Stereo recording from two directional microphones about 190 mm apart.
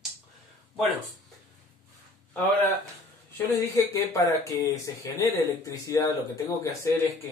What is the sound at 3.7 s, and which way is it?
Speech, 15° left (ahead or behind).